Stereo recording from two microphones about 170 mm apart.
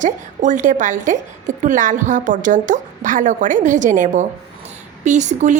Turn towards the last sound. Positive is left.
turn(degrees=-45)  # may be behind; listen again after turning